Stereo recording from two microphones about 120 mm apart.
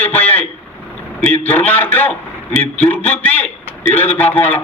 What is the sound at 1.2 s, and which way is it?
A man's voice, 15° left (ahead or behind).